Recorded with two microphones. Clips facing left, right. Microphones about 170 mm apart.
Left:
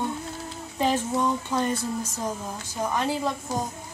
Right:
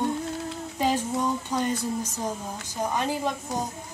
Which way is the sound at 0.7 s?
15° right (ahead or behind).